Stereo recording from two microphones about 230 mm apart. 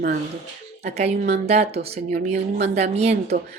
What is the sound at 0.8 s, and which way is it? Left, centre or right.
A woman's voice, right.